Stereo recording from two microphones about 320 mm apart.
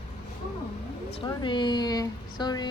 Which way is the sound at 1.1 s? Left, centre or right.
Centre.